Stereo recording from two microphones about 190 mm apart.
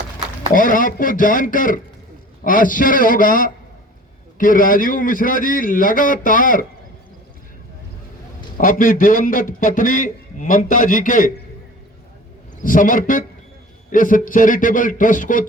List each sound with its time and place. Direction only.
0.5 s a man's voice: 45° left (ahead or behind)
8.5 s a man's voice: 45° left (ahead or behind)
12.6 s a man's voice: 45° left (ahead or behind)